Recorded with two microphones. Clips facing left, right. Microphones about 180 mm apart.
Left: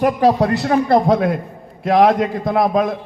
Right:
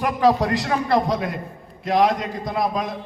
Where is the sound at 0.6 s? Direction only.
50° left (ahead or behind).